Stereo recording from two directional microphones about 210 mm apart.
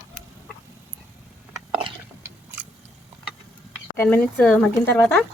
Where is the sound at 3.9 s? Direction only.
10° left (ahead or behind).